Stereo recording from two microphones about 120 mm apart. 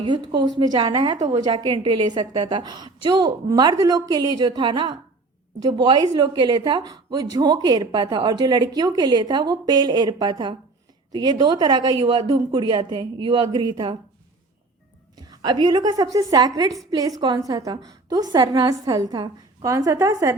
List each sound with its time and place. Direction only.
0.0 s a woman's voice: 40° right (ahead or behind)
15.1 s a woman's voice: 35° right (ahead or behind)